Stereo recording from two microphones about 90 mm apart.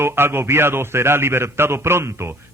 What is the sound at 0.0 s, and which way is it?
A man's voice, 25° right (ahead or behind).